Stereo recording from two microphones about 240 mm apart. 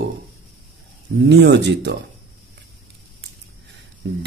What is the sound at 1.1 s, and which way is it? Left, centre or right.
Speech, right.